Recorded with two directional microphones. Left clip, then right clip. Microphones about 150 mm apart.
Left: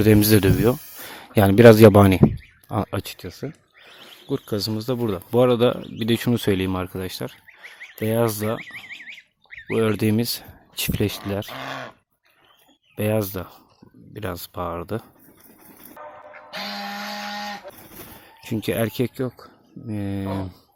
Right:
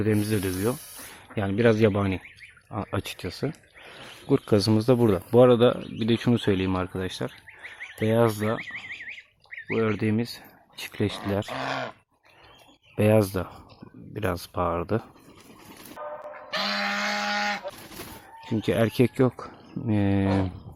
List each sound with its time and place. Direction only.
0.0 s speech: 55° left (ahead or behind); by 2.2 s 75° left (ahead or behind)
2.6 s speech: 50° left (ahead or behind)
3.0 s speech: 10° left (ahead or behind)
3.2 s a sound: centre (ahead or behind)
4.3 s speech: 15° right (ahead or behind)
5.0 s speech: centre (ahead or behind); by 8.6 s 25° left (ahead or behind)
9.6 s speech: 50° left (ahead or behind)
11.4 s speech: 50° right (ahead or behind)
13.0 s speech: centre (ahead or behind)
16.5 s a sound: 5° left (ahead or behind)
17.2 s goose: centre (ahead or behind)
17.7 s a sound: 30° left (ahead or behind); by 19.1 s centre (ahead or behind)
19.1 s speech: 25° right (ahead or behind)
19.9 s speech: 5° right (ahead or behind)